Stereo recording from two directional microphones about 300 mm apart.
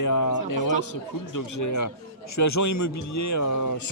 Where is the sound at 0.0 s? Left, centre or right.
Left.